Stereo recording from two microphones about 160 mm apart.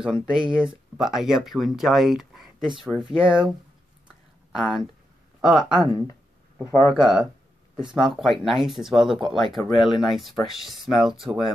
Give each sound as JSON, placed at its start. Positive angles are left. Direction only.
{"t": 0.0, "sound": "speech", "side_deg": -5}
{"t": 6.6, "sound": "speech", "side_deg": 20}
{"t": 6.9, "sound": "speech", "side_deg": 0}
{"t": 9.6, "sound": "speech", "side_deg": 30}
{"t": 9.9, "sound": "speech", "side_deg": 0}